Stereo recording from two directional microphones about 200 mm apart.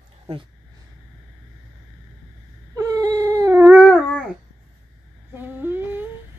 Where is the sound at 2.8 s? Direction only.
15° right (ahead or behind).